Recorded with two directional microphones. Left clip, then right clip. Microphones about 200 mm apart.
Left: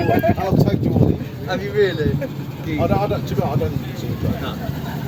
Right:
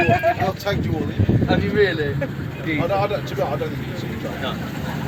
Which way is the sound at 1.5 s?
65° left (ahead or behind).